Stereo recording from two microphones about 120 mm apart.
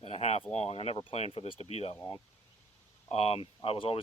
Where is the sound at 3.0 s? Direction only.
60° left (ahead or behind).